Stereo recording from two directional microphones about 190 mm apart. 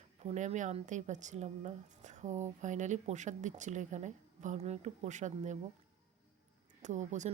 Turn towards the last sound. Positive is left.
turn(degrees=-40)  # may be behind; listen again after turning